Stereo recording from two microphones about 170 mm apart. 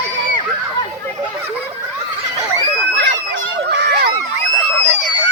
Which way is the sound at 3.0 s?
90° right.